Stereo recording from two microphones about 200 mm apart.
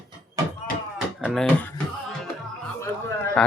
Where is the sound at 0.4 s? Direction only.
15° right (ahead or behind).